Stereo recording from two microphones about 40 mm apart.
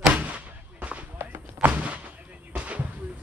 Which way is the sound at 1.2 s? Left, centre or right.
Right.